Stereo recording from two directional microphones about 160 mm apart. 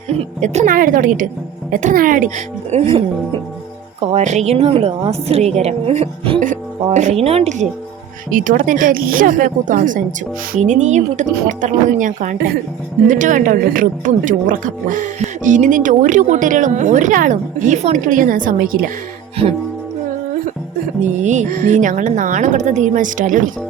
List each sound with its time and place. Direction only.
0.1 s a woman's voice: 45° right (ahead or behind)
4.0 s a woman's voice: 45° right (ahead or behind)
8.3 s a woman's voice: 55° right (ahead or behind)
21.0 s a woman's voice: 50° right (ahead or behind)